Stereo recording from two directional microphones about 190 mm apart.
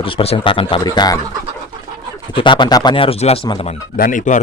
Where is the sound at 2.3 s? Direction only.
25° left (ahead or behind).